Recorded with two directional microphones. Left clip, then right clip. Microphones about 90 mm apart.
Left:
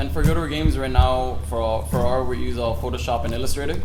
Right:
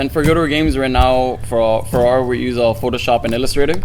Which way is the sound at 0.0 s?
30° right (ahead or behind).